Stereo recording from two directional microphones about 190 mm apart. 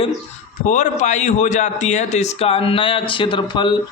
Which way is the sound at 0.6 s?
40° left (ahead or behind).